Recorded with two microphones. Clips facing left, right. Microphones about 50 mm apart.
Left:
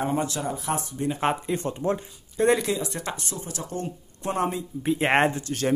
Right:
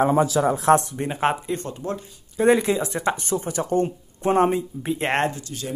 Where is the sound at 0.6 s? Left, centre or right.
Right.